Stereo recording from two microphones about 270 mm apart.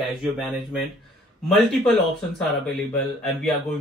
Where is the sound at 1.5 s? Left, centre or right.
Centre.